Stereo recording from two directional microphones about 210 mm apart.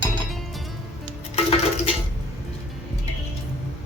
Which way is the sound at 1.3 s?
25° left (ahead or behind).